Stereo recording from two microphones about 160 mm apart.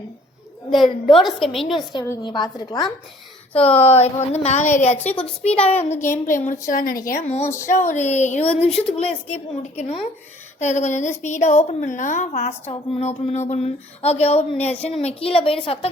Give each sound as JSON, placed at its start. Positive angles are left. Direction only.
{"t": 1.2, "sound": "a woman's voice", "side_deg": 0}
{"t": 1.9, "sound": "a woman's voice", "side_deg": 25}
{"t": 3.5, "sound": "a child's voice", "side_deg": 35}
{"t": 5.0, "sound": "a woman's voice", "side_deg": 10}
{"t": 5.6, "sound": "a child's voice", "side_deg": 40}
{"t": 6.2, "sound": "a woman's voice", "side_deg": 55}
{"t": 7.4, "sound": "a woman's voice", "side_deg": 15}
{"t": 7.7, "sound": "a woman's voice", "side_deg": 45}